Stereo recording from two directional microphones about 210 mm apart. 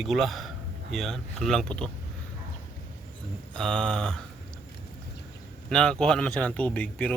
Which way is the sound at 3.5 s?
5° left (ahead or behind).